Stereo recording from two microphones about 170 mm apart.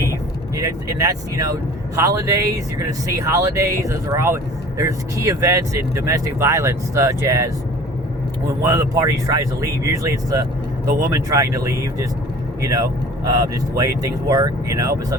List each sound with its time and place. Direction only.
0.5 s speech: 20° right (ahead or behind)